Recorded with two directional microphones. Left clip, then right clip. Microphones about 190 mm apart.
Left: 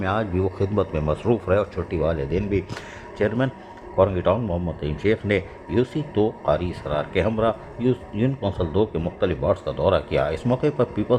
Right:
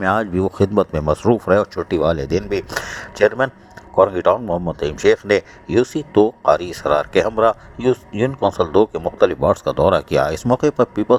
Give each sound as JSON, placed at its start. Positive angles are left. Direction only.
{"t": 0.0, "sound": "speech", "side_deg": -40}